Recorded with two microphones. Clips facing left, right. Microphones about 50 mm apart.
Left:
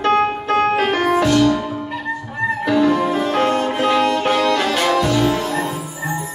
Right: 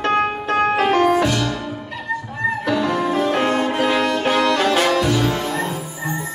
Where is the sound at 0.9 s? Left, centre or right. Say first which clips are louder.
Right 2 dB; left.